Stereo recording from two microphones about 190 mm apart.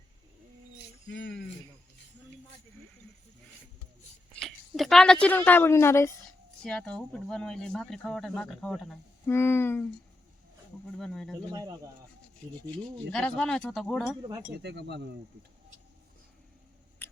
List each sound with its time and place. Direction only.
4.4 s speech: centre (ahead or behind)
9.2 s a sound: 10° left (ahead or behind)
10.9 s speech: centre (ahead or behind)
13.1 s speech: 5° left (ahead or behind)
14.2 s speech: 20° right (ahead or behind)
14.6 s speech: 65° right (ahead or behind)
17.0 s scissors: 10° left (ahead or behind)